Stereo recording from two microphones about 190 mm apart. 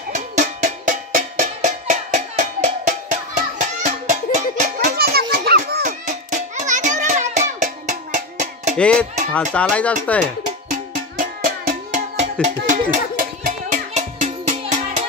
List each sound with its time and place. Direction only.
0.1 s music: 40° right (ahead or behind)
4.9 s children playing: 55° right (ahead or behind)
5.3 s music: 55° right (ahead or behind); by 8.7 s 40° right (ahead or behind)
8.7 s music: 5° left (ahead or behind)
9.3 s speech: 5° left (ahead or behind)
10.7 s music: 45° right (ahead or behind)